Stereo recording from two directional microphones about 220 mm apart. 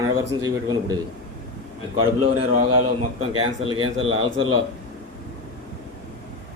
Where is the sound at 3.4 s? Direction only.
25° right (ahead or behind).